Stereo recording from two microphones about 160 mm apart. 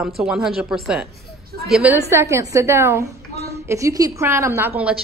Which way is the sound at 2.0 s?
15° right (ahead or behind).